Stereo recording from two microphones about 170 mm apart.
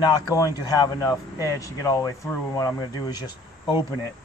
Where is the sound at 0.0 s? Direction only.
20° left (ahead or behind).